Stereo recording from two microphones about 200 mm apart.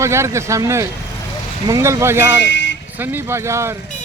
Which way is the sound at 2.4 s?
65° left (ahead or behind).